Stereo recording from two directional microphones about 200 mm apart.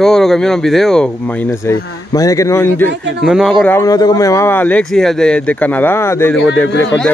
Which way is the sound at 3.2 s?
5° right (ahead or behind).